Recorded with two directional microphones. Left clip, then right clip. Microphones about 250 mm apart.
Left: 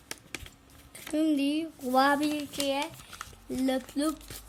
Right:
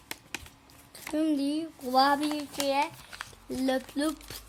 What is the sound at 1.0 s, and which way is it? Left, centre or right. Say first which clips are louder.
Speech: left 1 dB; centre.